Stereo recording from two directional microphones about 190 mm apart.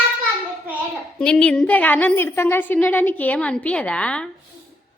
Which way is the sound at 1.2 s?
5° left (ahead or behind).